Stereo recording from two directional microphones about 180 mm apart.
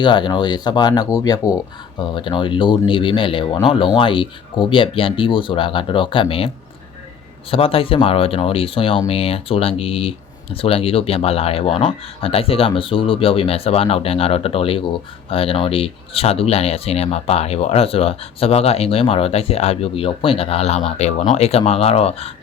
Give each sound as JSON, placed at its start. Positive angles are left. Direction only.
{"t": 0.0, "sound": "speech", "side_deg": 25}
{"t": 7.5, "sound": "speech", "side_deg": 30}